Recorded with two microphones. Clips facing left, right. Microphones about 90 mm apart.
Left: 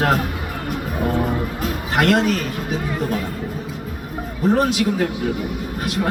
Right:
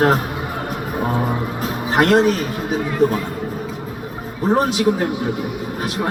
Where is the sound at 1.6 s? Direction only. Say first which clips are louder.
Right 4 dB; 30° right (ahead or behind).